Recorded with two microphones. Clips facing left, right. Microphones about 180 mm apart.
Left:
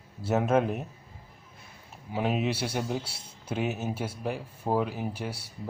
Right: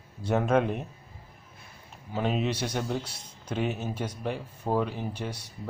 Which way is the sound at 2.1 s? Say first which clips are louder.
Even; 5° left (ahead or behind).